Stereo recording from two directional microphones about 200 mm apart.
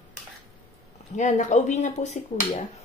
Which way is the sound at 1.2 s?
35° left (ahead or behind).